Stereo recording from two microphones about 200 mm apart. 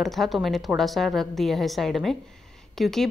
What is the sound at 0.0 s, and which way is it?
A woman's voice, centre (ahead or behind).